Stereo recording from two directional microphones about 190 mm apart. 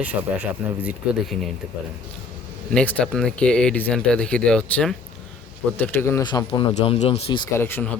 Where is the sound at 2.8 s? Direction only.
5° left (ahead or behind); by 7.4 s 30° left (ahead or behind).